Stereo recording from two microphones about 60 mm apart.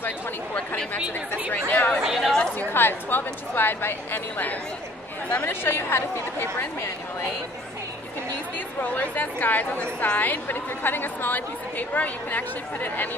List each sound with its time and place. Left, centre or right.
1.5 s speech: left
2.0 s speech: centre
2.7 s a woman's voice: left
8.5 s a woman's voice: left